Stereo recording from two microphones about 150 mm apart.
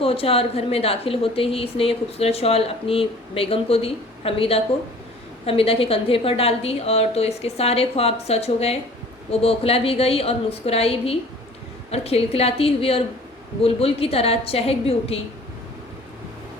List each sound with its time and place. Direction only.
0.0 s a woman's voice: 40° left (ahead or behind)